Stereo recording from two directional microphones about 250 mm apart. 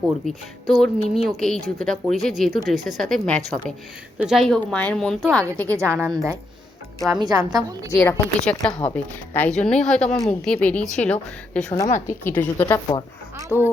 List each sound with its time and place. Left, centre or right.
0.3 s speech: centre
6.0 s a woman's voice: centre
7.9 s speech: centre
11.9 s a woman's voice: left
12.2 s a woman's voice: centre